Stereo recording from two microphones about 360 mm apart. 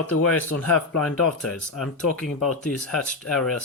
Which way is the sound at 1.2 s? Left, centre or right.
Left.